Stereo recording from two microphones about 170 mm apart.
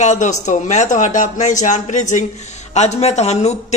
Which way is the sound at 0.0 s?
45° left (ahead or behind).